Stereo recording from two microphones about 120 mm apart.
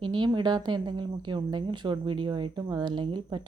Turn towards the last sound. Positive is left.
turn(degrees=-40)  # may be behind; listen again after turning